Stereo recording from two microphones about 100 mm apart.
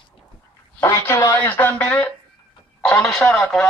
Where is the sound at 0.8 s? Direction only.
30° left (ahead or behind).